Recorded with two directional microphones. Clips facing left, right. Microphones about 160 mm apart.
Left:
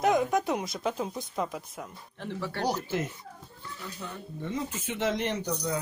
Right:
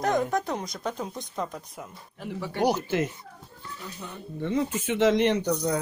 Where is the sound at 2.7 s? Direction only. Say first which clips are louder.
Right 4 dB; 80° right.